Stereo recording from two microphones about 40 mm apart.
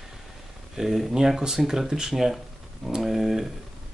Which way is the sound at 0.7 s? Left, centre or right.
Centre.